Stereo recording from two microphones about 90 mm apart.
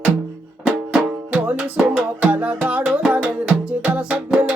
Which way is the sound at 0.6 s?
10° right (ahead or behind).